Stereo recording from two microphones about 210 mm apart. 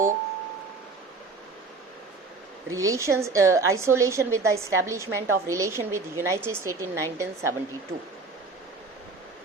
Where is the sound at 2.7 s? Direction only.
15° right (ahead or behind).